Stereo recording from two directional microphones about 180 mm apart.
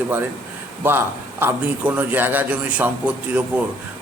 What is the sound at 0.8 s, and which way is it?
A man's voice, 10° right (ahead or behind).